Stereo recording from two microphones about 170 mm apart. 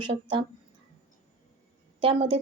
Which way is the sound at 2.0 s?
30° right (ahead or behind).